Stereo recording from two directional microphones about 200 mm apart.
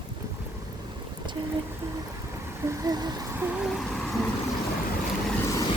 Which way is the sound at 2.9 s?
20° right (ahead or behind).